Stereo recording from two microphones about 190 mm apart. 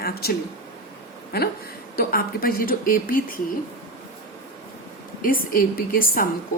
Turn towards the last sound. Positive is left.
turn(degrees=50)  # may be behind; listen again after turning